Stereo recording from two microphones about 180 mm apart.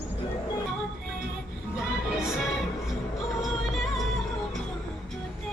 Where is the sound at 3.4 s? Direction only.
Centre (ahead or behind).